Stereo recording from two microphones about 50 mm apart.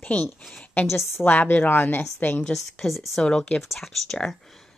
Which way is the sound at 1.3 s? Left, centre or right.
Left.